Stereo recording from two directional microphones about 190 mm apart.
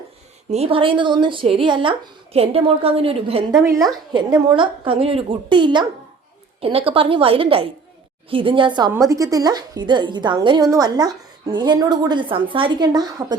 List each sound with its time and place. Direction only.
0.5 s a woman's voice: 30° right (ahead or behind)
3.6 s a woman's voice: 15° right (ahead or behind)